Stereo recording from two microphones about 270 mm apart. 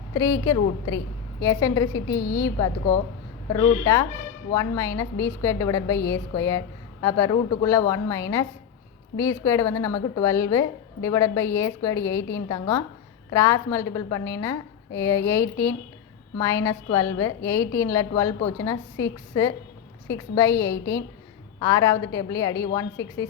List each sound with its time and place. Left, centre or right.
0.1 s a woman's voice: centre